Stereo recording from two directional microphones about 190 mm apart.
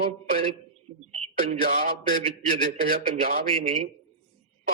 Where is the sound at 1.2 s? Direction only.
35° right (ahead or behind).